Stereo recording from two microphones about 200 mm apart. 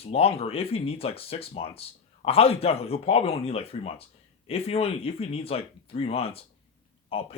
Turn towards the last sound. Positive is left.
turn(degrees=30)  # may be behind; listen again after turning